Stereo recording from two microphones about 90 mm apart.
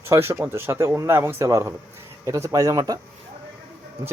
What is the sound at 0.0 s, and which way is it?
Speech, 30° right (ahead or behind).